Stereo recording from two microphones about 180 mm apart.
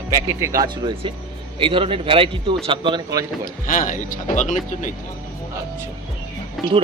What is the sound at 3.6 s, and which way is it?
Speech, 50° left (ahead or behind).